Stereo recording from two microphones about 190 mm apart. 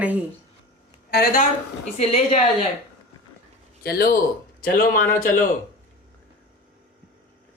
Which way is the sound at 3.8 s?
55° left (ahead or behind).